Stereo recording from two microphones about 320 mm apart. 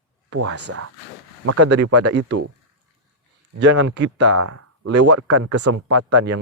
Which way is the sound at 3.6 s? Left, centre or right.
Right.